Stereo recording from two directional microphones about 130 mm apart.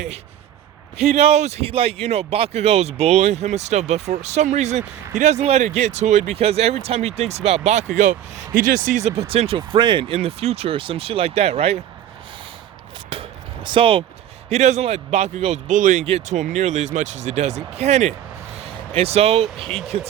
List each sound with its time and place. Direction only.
0.9 s speech: 50° right (ahead or behind)
8.5 s speech: 85° right; by 10.2 s 40° right (ahead or behind)
10.2 s speech: 50° right (ahead or behind)
13.1 s chop: 40° right (ahead or behind)
14.5 s speech: 55° right (ahead or behind)
18.5 s a sound: 50° right (ahead or behind)
19.6 s speech: centre (ahead or behind)